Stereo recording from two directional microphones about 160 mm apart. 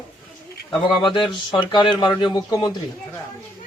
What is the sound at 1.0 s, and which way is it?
Speech, 30° left (ahead or behind).